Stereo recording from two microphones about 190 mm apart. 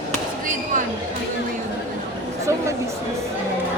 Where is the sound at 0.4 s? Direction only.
40° right (ahead or behind).